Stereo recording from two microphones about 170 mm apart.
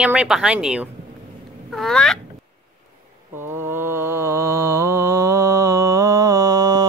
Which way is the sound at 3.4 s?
15° right (ahead or behind).